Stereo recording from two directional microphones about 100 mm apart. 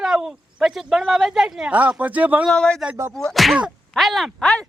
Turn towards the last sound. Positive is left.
turn(degrees=5)  # may be behind; listen again after turning